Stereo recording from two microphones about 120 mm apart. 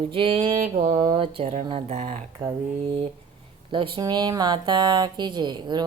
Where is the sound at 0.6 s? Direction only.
90° right.